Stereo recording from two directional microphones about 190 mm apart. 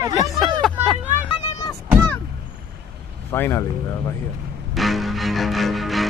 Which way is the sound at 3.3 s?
10° left (ahead or behind).